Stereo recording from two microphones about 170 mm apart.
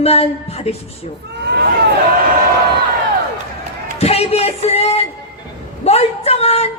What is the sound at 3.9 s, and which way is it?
A man's voice, 35° left (ahead or behind).